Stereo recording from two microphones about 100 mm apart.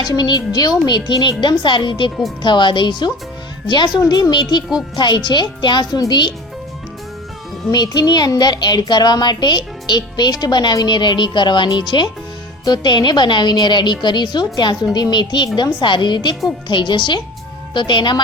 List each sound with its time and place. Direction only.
0.0 s a child's voice: 45° left (ahead or behind)
7.7 s a child's voice: 45° left (ahead or behind)